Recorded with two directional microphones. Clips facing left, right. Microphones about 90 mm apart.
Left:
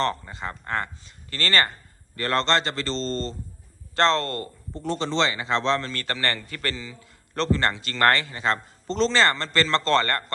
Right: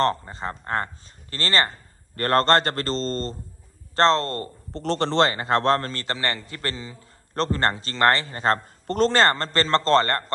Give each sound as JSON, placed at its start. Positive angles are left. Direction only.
{"t": 0.0, "sound": "a man's voice", "side_deg": -35}
{"t": 2.1, "sound": "a man's voice", "side_deg": -50}
{"t": 4.7, "sound": "a man's voice", "side_deg": -75}
{"t": 5.9, "sound": "a man's voice", "side_deg": -25}
{"t": 6.6, "sound": "a man's voice", "side_deg": -35}